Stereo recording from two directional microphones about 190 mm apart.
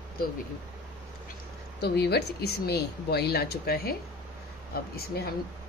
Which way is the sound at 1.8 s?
60° left (ahead or behind).